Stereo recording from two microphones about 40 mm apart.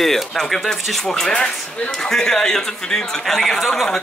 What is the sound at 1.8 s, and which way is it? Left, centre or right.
Speech, centre.